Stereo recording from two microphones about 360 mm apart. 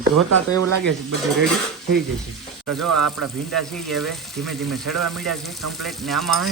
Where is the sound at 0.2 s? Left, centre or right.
Right.